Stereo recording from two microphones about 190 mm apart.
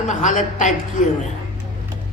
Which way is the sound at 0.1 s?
40° left (ahead or behind).